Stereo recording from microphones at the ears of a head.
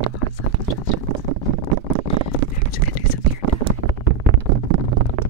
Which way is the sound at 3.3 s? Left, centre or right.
Right.